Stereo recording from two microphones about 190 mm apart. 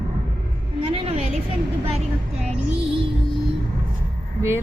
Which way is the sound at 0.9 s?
35° right (ahead or behind).